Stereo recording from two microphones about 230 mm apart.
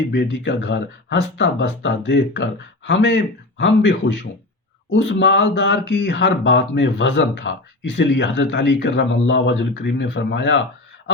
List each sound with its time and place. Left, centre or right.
0.1 s speech: left